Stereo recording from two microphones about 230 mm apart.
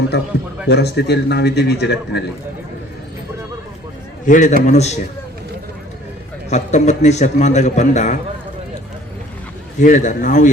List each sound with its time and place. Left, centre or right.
0.1 s a man's voice: left
4.3 s a man's voice: left
6.5 s a man's voice: left
9.8 s a man's voice: left